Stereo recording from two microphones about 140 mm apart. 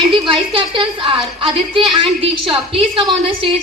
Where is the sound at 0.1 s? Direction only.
40° right (ahead or behind).